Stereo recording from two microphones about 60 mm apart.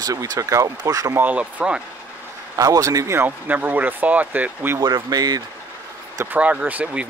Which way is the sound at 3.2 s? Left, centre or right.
Right.